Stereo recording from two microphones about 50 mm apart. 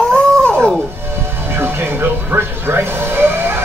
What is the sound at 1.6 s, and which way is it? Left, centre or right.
Speech, right.